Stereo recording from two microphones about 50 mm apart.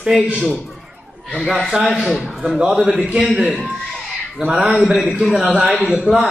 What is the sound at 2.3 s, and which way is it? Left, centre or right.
Speech, centre.